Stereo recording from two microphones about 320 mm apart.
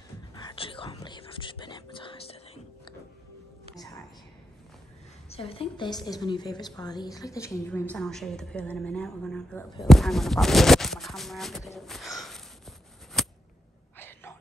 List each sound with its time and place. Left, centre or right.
0.3 s whispering: centre
5.3 s a woman's voice: centre
13.9 s a sound: centre